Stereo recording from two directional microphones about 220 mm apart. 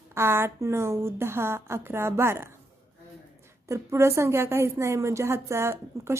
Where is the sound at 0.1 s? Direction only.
10° right (ahead or behind).